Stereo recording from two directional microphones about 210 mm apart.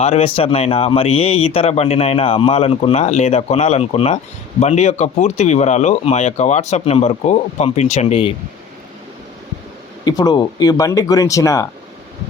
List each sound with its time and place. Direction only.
0.0 s speech: 30° left (ahead or behind)
10.0 s speech: 20° left (ahead or behind)